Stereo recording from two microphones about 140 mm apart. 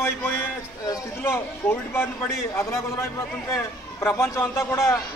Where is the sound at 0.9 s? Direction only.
15° left (ahead or behind).